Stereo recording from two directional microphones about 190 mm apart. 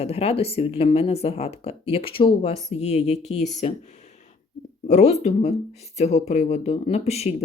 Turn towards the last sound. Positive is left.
turn(degrees=35)  # may be behind; listen again after turning